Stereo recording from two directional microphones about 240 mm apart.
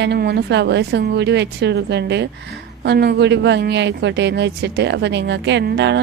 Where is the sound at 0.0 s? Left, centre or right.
Right.